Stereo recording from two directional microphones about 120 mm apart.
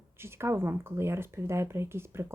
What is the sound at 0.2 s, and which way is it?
Speech, 20° right (ahead or behind).